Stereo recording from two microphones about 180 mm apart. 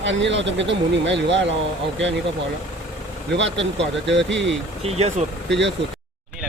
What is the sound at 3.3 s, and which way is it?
Speech, 85° right.